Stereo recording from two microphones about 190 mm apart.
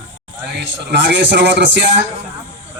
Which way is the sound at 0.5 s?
65° right (ahead or behind).